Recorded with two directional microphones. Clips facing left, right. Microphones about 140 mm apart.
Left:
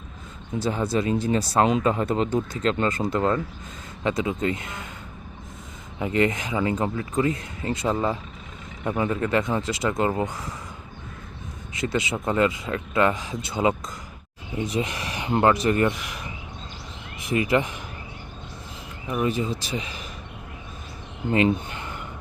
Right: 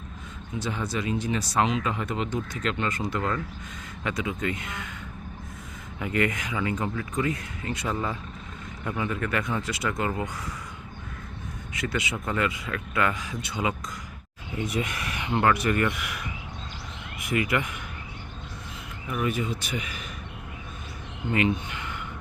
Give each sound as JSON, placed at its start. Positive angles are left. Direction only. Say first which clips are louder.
{"t": 0.6, "sound": "speech", "louder": "left 6 dB", "side_deg": 30}
{"t": 6.0, "sound": "speech", "louder": "left 4 dB", "side_deg": 25}
{"t": 11.7, "sound": "speech", "louder": "left 4 dB", "side_deg": 25}
{"t": 19.0, "sound": "speech", "louder": "left 3 dB", "side_deg": 25}
{"t": 21.3, "sound": "speech", "louder": "left 4 dB", "side_deg": 35}